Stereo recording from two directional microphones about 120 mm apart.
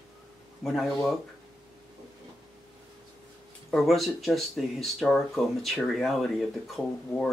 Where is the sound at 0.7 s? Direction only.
Centre (ahead or behind).